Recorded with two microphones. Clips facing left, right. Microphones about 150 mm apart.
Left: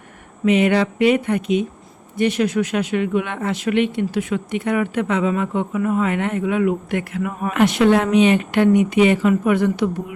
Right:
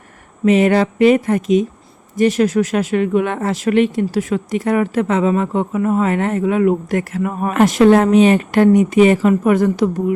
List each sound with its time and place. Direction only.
0.4 s speech: 40° right (ahead or behind)